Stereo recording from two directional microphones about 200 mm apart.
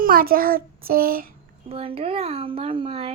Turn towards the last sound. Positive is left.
turn(degrees=-30)  # may be behind; listen again after turning